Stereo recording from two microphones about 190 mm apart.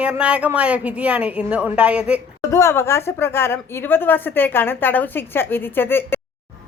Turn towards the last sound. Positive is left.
turn(degrees=10)  # may be behind; listen again after turning